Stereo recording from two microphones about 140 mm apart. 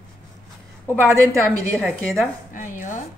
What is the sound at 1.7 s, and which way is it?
Speech, 5° left (ahead or behind).